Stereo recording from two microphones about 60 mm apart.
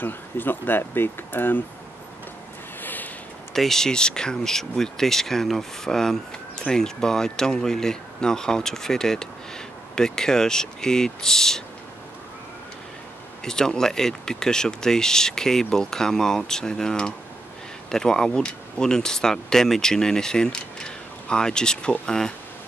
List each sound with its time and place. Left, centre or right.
0.0 s speech: left
2.8 s a sound: left
3.5 s speech: centre
13.4 s speech: centre